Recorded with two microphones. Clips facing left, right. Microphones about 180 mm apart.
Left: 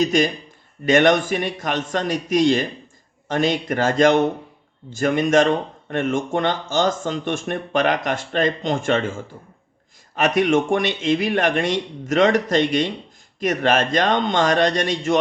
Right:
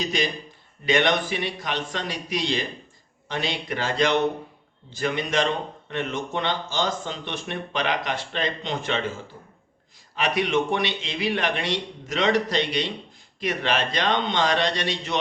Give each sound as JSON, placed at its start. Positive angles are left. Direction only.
{"t": 0.0, "sound": "speech", "side_deg": 45}